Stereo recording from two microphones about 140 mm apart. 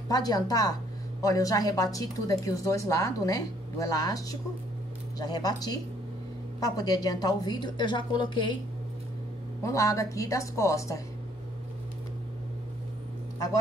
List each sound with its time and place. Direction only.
0.1 s a woman's voice: 25° left (ahead or behind)
9.6 s speech: 20° left (ahead or behind)